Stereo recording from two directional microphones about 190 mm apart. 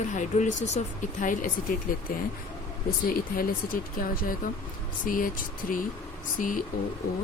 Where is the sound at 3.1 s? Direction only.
50° left (ahead or behind).